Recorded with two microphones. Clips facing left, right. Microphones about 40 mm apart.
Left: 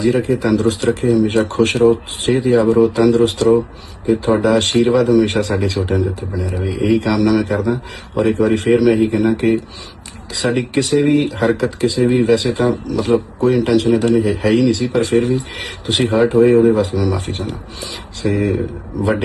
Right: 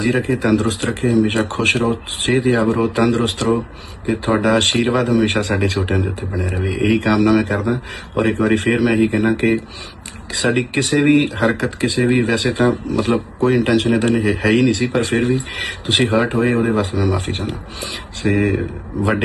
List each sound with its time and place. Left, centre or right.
0.0 s speech: right